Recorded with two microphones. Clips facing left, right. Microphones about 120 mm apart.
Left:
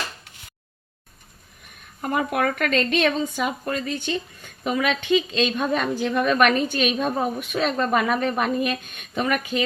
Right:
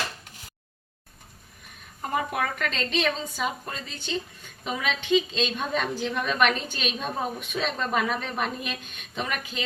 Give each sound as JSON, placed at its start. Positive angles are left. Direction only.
{"t": 2.0, "sound": "a woman's voice", "side_deg": 80}